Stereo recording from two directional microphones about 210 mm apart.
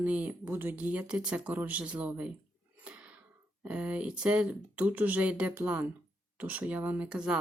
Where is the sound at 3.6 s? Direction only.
5° right (ahead or behind).